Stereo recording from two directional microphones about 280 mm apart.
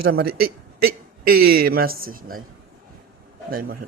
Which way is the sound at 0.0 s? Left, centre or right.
Right.